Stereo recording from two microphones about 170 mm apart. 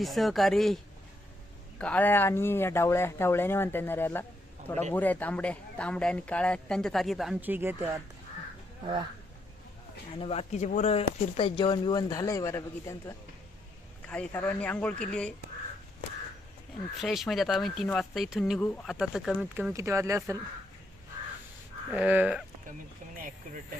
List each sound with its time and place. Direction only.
0.0 s speech: centre (ahead or behind)
1.8 s speech: 10° left (ahead or behind); by 7.9 s 10° right (ahead or behind)
10.2 s speech: 35° left (ahead or behind); by 15.3 s 5° left (ahead or behind)
17.0 s speech: centre (ahead or behind)
19.7 s speech: 15° right (ahead or behind)
21.9 s speech: 5° right (ahead or behind)